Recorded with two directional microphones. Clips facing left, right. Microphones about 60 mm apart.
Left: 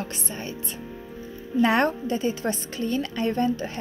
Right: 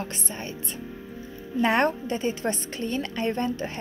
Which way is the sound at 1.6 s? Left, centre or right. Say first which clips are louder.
Left 1 dB; right.